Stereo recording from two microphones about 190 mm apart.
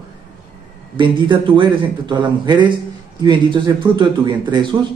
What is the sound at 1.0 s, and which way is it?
A man's voice, 25° right (ahead or behind).